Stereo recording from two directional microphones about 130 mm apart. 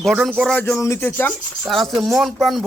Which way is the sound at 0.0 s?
Centre (ahead or behind).